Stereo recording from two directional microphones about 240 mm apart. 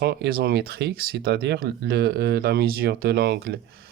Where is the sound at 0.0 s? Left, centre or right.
Right.